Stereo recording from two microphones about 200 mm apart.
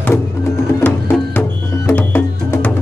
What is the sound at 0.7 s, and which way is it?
Music, 10° left (ahead or behind).